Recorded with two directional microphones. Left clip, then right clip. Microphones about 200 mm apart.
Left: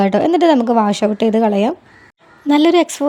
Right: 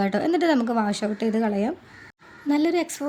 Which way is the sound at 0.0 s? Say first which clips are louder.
Left 10 dB; 30° left (ahead or behind).